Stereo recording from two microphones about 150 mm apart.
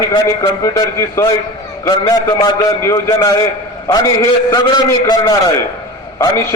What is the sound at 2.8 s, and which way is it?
A man's voice, 20° left (ahead or behind).